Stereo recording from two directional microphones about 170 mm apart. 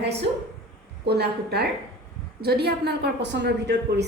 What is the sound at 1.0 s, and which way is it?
A woman's voice, 70° right (ahead or behind).